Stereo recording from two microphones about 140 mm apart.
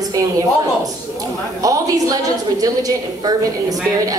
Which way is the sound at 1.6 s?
25° right (ahead or behind).